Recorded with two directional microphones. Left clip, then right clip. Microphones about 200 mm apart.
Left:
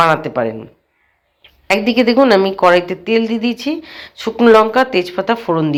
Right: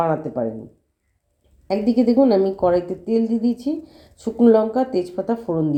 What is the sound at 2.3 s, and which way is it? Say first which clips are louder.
Speech: left 7 dB; 15° left (ahead or behind).